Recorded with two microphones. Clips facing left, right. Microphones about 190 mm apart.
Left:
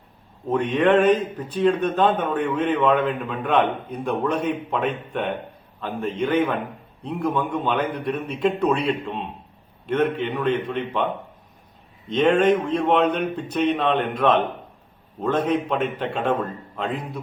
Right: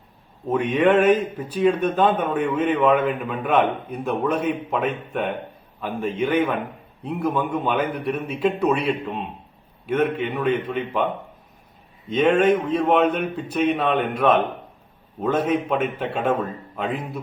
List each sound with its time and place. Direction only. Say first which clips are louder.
0.4 s a man's voice: right 1 dB; 10° right (ahead or behind)